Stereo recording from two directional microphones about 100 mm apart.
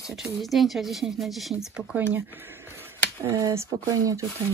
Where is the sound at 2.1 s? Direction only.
20° right (ahead or behind).